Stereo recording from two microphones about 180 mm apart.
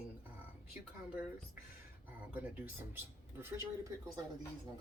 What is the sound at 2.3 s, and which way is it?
Speech, 10° right (ahead or behind).